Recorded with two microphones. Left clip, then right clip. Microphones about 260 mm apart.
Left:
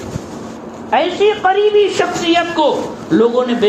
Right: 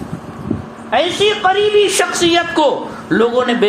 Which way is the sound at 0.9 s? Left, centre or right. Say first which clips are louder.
Left 1 dB; right.